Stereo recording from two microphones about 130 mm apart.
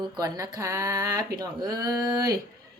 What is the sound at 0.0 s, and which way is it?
Speech, 30° right (ahead or behind).